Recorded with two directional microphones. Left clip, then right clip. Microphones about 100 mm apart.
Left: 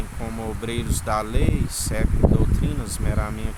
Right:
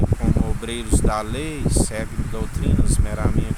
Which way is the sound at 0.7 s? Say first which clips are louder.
Right 2 dB; 5° left (ahead or behind).